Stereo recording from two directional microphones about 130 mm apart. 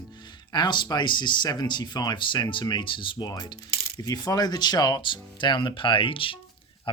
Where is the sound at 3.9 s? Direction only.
30° left (ahead or behind).